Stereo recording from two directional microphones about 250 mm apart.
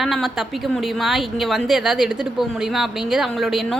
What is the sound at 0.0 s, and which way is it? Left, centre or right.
A woman's voice, centre.